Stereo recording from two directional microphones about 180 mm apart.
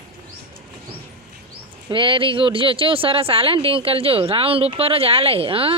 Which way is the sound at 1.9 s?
30° right (ahead or behind).